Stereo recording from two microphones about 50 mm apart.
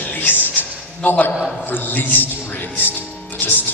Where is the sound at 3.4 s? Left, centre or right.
Left.